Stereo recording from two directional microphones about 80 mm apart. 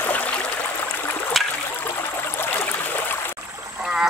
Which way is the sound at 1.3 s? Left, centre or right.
Centre.